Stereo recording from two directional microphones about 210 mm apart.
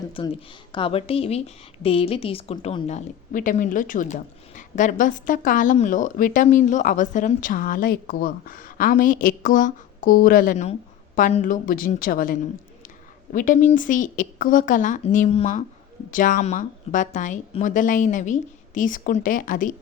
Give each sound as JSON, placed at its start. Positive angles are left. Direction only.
{"t": 0.2, "sound": "a woman's voice", "side_deg": 25}